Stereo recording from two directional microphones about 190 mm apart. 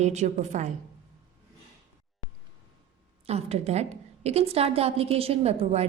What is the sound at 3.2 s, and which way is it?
A woman's voice, 35° right (ahead or behind).